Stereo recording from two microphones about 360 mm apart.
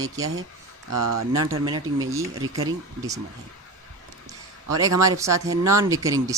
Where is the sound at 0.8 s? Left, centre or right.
Right.